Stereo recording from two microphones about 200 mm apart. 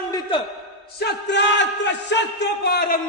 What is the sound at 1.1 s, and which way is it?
Speech, 60° left (ahead or behind).